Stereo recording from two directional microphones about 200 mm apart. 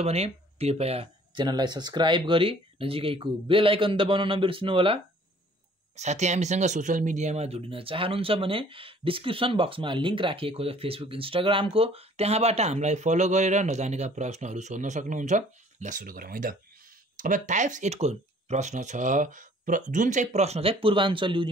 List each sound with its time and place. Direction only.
0.0 s speech: 30° right (ahead or behind)